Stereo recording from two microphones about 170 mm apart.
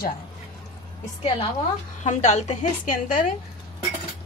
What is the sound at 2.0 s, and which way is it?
A woman's voice, 40° left (ahead or behind).